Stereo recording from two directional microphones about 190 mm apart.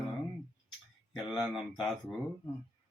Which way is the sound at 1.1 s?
5° right (ahead or behind).